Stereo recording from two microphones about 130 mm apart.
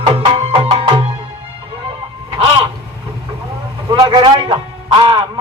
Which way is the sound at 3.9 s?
35° right (ahead or behind).